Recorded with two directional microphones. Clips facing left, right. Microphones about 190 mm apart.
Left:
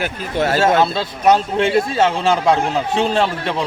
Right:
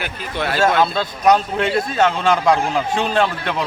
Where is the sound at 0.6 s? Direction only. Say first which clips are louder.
Right 2 dB; 25° left (ahead or behind).